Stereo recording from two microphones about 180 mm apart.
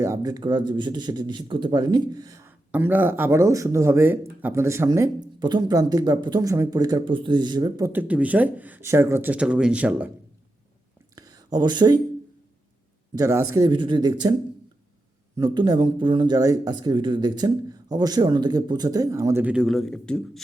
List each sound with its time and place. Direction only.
0.0 s speech: 20° right (ahead or behind)
11.1 s a sound: 20° right (ahead or behind)
13.1 s speech: 15° right (ahead or behind)
15.4 s speech: 20° right (ahead or behind); by 20.4 s 5° left (ahead or behind)